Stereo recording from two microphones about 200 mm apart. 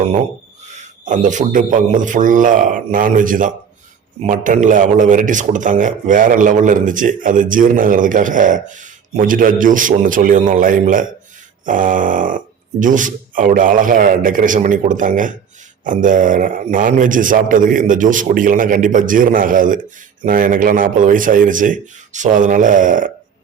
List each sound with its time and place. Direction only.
0.7 s a man's voice: 40° right (ahead or behind)